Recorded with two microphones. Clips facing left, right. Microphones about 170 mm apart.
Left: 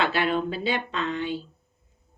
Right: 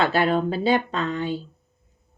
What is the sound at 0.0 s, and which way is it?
A woman's voice, 40° right (ahead or behind).